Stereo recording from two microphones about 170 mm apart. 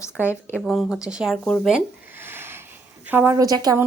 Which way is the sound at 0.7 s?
Centre (ahead or behind).